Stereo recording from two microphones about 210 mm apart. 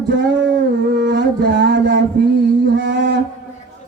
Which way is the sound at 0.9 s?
60° right (ahead or behind).